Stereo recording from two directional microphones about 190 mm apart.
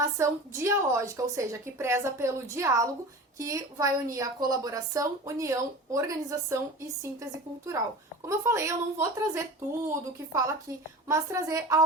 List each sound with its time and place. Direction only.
0.0 s a woman's voice: 15° right (ahead or behind)
8.3 s a woman's voice: 15° right (ahead or behind)